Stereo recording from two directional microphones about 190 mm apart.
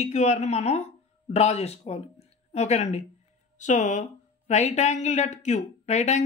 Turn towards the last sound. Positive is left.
turn(degrees=35)  # may be behind; listen again after turning